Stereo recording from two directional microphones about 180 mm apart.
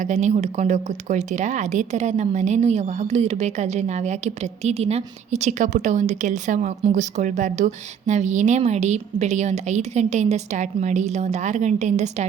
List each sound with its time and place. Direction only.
0.0 s a woman's voice: 40° right (ahead or behind)